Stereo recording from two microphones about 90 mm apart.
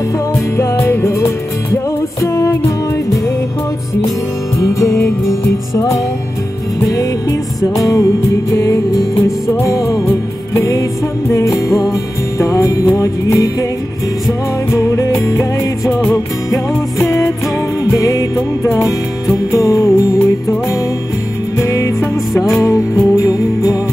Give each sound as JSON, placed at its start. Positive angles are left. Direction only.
{"t": 0.6, "sound": "music", "side_deg": 30}
{"t": 4.6, "sound": "music", "side_deg": 35}
{"t": 6.9, "sound": "music", "side_deg": 40}
{"t": 14.7, "sound": "music", "side_deg": 35}
{"t": 21.5, "sound": "music", "side_deg": 35}